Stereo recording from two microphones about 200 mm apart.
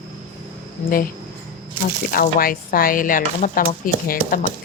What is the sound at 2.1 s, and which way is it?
Speech, 45° left (ahead or behind).